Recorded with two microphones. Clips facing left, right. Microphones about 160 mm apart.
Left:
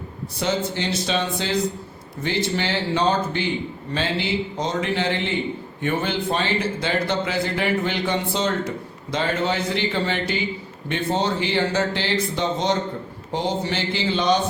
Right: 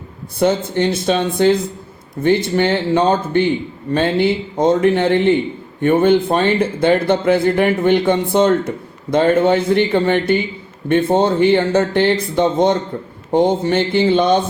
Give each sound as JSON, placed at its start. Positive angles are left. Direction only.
{"t": 0.3, "sound": "speech", "side_deg": -55}